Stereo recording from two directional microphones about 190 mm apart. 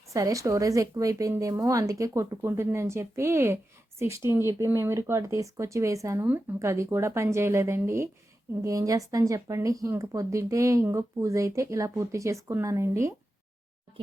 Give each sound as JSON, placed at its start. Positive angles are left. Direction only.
{"t": 0.1, "sound": "speech", "side_deg": -15}